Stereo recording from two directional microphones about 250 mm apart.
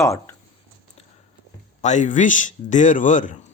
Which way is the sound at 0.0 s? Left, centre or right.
Centre.